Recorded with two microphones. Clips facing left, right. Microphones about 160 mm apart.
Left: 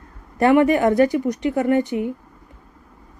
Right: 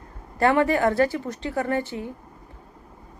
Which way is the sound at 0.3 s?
20° left (ahead or behind).